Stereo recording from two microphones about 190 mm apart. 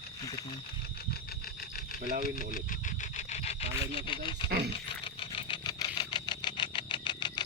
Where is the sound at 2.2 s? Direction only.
50° left (ahead or behind).